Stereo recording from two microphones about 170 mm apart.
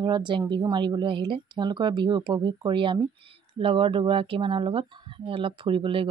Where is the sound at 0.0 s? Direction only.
25° right (ahead or behind).